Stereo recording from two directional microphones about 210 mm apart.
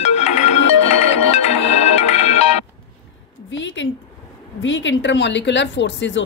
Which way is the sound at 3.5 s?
60° left (ahead or behind).